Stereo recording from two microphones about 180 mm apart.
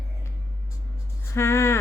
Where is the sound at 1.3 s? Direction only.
15° left (ahead or behind).